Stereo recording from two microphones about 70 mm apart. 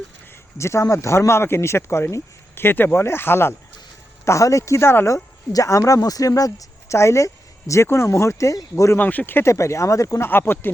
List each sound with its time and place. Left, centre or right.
0.5 s speech: left
4.3 s speech: left
5.1 s speech: left
9.0 s speech: left
10.2 s speech: left